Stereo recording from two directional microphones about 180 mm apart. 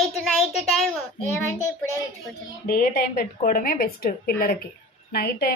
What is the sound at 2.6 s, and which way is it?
A woman's voice, 60° left (ahead or behind).